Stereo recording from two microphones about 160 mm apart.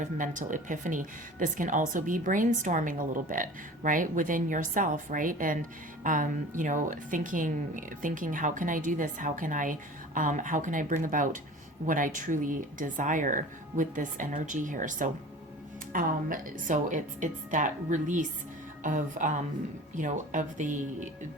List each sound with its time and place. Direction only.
0.0 s a woman's voice: 50° right (ahead or behind)